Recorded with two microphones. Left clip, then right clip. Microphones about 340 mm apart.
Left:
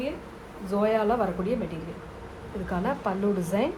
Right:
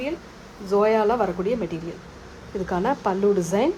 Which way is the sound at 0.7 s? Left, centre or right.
Right.